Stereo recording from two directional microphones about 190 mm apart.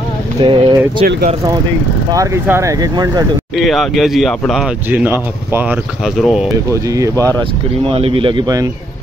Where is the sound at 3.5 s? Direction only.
Centre (ahead or behind).